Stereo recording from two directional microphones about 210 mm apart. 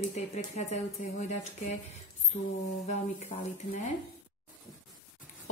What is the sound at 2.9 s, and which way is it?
A woman's voice, 35° left (ahead or behind).